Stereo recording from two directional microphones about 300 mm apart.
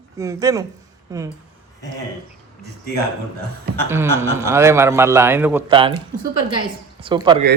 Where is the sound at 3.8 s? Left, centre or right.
Centre.